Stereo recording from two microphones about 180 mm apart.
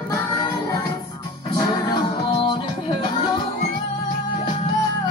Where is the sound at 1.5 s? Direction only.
25° left (ahead or behind).